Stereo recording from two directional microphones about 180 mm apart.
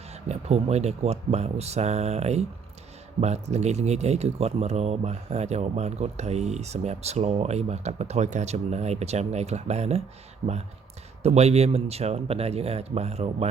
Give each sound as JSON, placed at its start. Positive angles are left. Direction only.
{"t": 0.1, "sound": "speech", "side_deg": -35}